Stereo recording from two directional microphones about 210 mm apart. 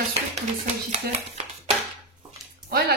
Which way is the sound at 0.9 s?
30° right (ahead or behind).